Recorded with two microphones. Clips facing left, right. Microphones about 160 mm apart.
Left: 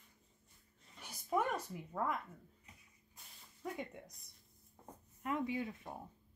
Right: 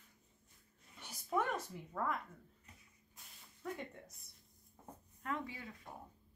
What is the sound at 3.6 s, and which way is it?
Speech, 15° left (ahead or behind).